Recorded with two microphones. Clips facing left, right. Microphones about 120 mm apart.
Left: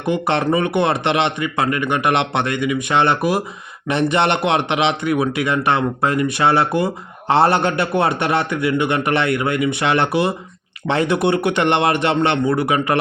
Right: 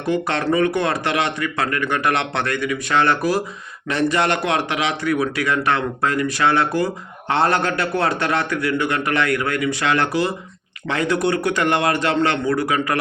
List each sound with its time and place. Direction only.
0.0 s a man's voice: 20° left (ahead or behind)